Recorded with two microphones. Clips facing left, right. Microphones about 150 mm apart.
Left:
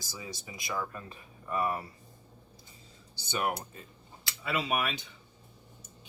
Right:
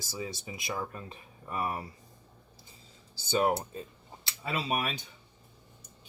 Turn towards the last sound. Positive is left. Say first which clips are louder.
# left 1 dB
turn(degrees=-35)  # may be behind; listen again after turning